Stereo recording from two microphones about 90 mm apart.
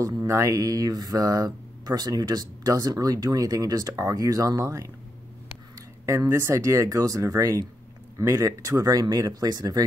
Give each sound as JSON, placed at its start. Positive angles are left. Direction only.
{"t": 0.0, "sound": "speech", "side_deg": -40}
{"t": 6.0, "sound": "speech", "side_deg": -35}